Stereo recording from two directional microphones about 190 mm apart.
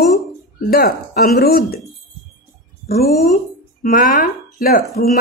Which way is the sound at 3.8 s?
45° left (ahead or behind).